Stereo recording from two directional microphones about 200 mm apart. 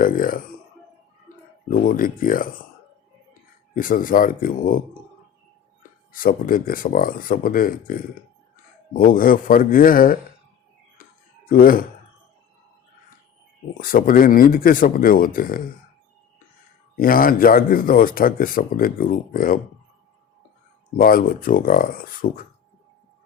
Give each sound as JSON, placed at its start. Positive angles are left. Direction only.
{"t": 0.0, "sound": "speech", "side_deg": 45}
{"t": 1.7, "sound": "speech", "side_deg": 45}
{"t": 3.8, "sound": "speech", "side_deg": 45}
{"t": 6.1, "sound": "speech", "side_deg": 45}
{"t": 11.4, "sound": "speech", "side_deg": 45}
{"t": 13.7, "sound": "speech", "side_deg": 45}
{"t": 17.0, "sound": "speech", "side_deg": 45}
{"t": 20.9, "sound": "speech", "side_deg": 45}